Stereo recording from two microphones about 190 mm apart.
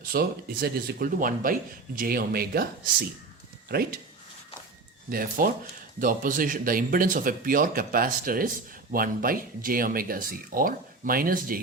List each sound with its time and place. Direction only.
0.0 s speech: 50° right (ahead or behind)
5.0 s speech: 50° right (ahead or behind)